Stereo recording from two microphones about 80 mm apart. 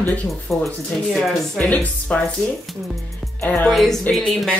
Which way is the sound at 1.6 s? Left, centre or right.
Centre.